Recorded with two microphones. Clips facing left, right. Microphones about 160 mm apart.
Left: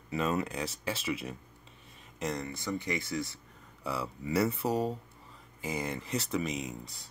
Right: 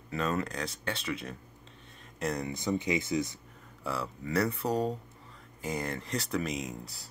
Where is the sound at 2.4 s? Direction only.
20° right (ahead or behind).